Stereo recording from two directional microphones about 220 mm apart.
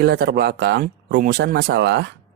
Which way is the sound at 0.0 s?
45° right (ahead or behind).